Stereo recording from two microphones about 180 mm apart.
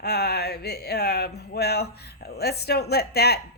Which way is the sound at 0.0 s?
65° left (ahead or behind).